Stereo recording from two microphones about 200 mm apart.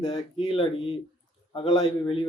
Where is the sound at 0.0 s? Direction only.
25° left (ahead or behind).